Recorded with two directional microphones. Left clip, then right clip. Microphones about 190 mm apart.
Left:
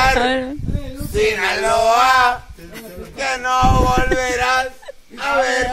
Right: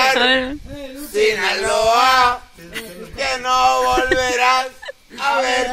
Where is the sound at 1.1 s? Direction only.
30° left (ahead or behind).